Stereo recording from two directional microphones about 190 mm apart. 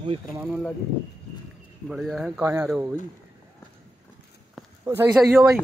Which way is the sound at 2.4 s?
15° right (ahead or behind).